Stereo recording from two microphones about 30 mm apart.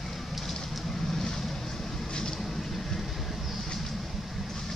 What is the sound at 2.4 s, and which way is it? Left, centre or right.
Vehicle, centre.